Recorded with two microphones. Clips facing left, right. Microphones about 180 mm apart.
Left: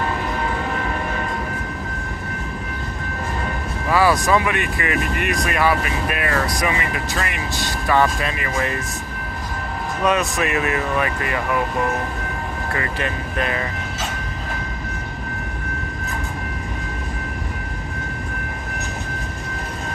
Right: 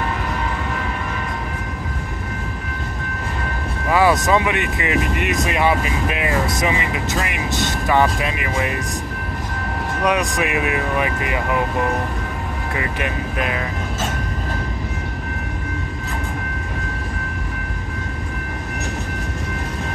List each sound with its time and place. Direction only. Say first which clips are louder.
3.9 s speech: right 1 dB; 20° right (ahead or behind)
10.0 s speech: even; 15° right (ahead or behind)
12.7 s speech: right 1 dB; 10° right (ahead or behind)